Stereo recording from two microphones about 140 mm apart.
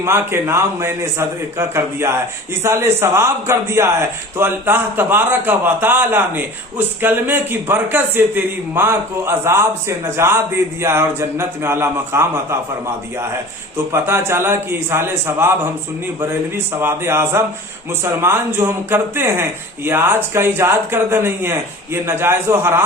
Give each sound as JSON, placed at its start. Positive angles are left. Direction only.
{"t": 0.0, "sound": "a man's voice", "side_deg": -20}
{"t": 13.9, "sound": "speech", "side_deg": -20}
{"t": 16.8, "sound": "speech", "side_deg": -20}